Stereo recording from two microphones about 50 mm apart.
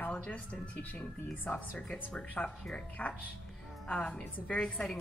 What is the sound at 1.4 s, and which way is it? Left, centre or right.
Speech, left.